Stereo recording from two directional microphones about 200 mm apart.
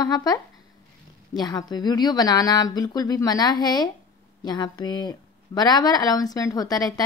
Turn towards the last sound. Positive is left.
turn(degrees=20)  # may be behind; listen again after turning